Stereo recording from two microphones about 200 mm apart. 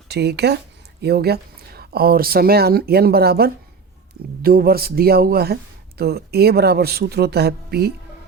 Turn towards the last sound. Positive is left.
turn(degrees=-55)  # may be behind; listen again after turning